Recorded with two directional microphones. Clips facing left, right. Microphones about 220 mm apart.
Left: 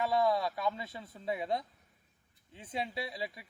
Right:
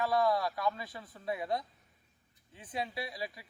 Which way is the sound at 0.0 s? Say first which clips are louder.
Even; 25° left (ahead or behind).